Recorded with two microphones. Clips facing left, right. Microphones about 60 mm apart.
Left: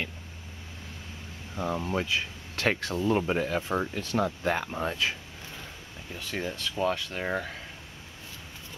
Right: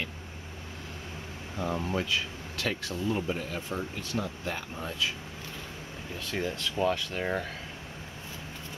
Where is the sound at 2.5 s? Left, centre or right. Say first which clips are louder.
Left 5 dB; left.